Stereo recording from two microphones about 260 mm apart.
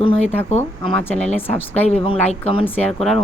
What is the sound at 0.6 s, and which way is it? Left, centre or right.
Speech, centre.